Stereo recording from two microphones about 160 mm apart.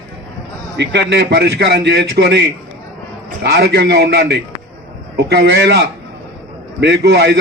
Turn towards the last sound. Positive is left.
turn(degrees=-90)